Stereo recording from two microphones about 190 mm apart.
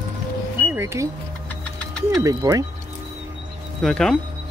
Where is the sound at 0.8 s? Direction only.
15° right (ahead or behind).